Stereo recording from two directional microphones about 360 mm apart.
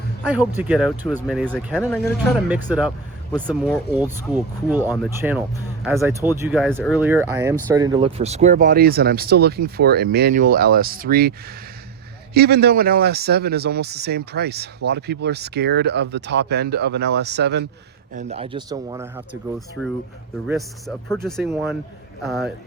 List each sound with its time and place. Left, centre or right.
0.3 s speech: centre
4.8 s speech: centre
5.8 s speech: centre